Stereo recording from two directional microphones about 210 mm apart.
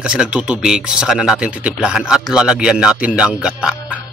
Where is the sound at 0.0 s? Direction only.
5° right (ahead or behind).